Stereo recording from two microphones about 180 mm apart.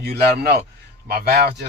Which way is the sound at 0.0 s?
60° right (ahead or behind).